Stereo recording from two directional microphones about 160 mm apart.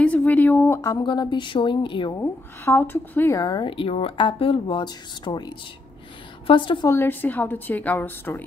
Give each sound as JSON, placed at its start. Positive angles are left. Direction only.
{"t": 0.0, "sound": "a woman's voice", "side_deg": 10}
{"t": 2.1, "sound": "a woman's voice", "side_deg": 15}
{"t": 6.9, "sound": "a woman's voice", "side_deg": 15}